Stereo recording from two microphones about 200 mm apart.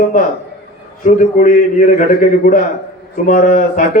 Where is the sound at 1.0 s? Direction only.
40° left (ahead or behind).